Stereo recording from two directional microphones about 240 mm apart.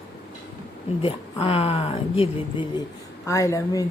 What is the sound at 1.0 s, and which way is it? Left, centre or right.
Speech, left.